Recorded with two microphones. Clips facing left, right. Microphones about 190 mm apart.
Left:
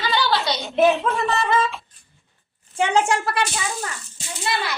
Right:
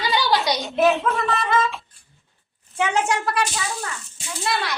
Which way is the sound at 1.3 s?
30° left (ahead or behind).